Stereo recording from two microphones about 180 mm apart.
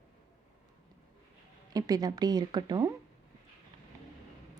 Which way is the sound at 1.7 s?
20° right (ahead or behind).